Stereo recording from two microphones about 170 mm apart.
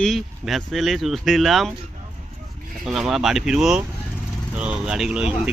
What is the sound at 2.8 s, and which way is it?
Speech, 5° right (ahead or behind).